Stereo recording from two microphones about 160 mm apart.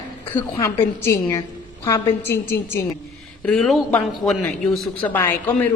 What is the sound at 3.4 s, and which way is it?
A man's voice, 5° left (ahead or behind).